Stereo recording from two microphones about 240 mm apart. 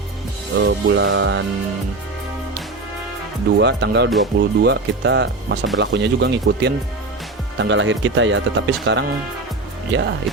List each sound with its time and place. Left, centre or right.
0.6 s speech: right
3.6 s speech: right